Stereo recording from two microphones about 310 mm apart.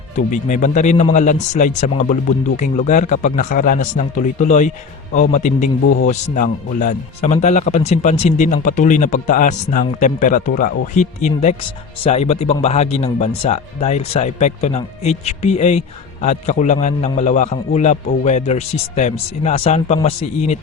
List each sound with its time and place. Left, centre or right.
0.2 s speech: left